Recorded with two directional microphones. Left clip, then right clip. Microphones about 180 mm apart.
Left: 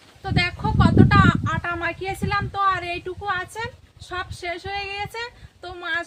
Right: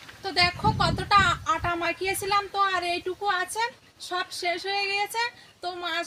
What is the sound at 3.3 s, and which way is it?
Speech, 25° left (ahead or behind).